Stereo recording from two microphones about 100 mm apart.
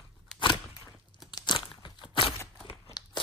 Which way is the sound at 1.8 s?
55° left (ahead or behind).